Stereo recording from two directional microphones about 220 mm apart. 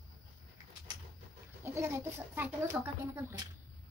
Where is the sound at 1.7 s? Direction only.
10° right (ahead or behind).